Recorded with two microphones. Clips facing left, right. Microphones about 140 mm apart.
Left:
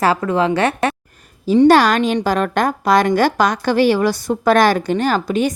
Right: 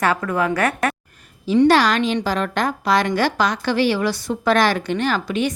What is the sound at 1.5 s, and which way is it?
A woman's voice, 45° left (ahead or behind).